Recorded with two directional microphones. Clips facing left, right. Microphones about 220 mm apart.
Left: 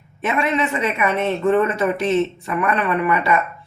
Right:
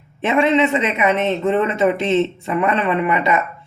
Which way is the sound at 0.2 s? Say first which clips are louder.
Right 5 dB; 25° right (ahead or behind).